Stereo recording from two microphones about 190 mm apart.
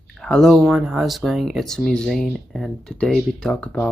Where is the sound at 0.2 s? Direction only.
5° left (ahead or behind).